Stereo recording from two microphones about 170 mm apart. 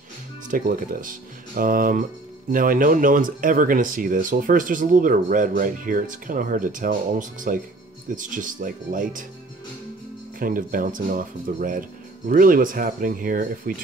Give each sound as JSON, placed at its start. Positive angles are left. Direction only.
{"t": 0.5, "sound": "speech", "side_deg": -55}
{"t": 10.4, "sound": "speech", "side_deg": -55}